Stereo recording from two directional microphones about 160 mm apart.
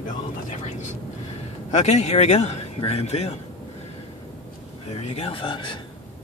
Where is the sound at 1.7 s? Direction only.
45° left (ahead or behind).